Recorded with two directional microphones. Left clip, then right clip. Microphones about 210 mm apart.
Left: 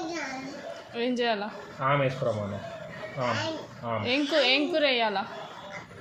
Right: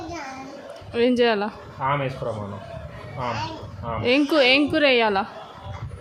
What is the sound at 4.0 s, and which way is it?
A woman's voice, 40° right (ahead or behind).